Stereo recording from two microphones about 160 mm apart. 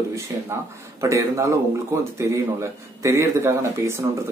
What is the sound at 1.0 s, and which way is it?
A man's voice, 20° right (ahead or behind).